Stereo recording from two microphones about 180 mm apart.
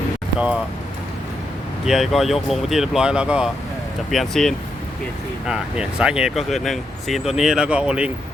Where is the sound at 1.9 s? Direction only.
Centre (ahead or behind).